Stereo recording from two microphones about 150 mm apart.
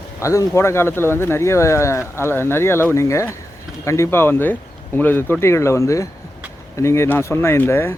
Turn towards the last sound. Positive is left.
turn(degrees=15)  # may be behind; listen again after turning